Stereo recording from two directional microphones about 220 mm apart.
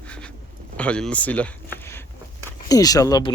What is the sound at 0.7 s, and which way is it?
Speech, 5° left (ahead or behind).